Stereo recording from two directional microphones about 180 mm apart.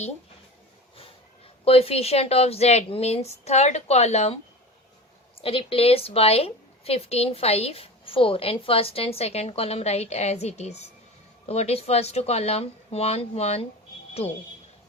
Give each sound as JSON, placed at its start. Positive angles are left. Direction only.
{"t": 1.6, "sound": "a woman's voice", "side_deg": 35}
{"t": 5.4, "sound": "a woman's voice", "side_deg": 30}